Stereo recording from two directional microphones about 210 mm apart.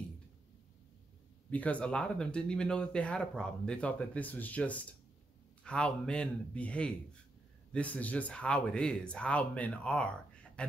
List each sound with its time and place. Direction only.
1.5 s speech: 5° left (ahead or behind)